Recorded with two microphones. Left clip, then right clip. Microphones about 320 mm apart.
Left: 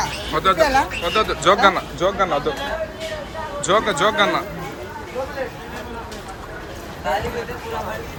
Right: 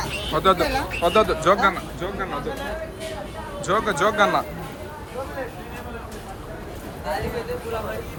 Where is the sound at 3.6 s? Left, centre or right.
Centre.